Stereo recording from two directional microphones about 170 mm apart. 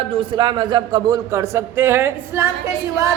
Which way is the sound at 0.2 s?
30° right (ahead or behind).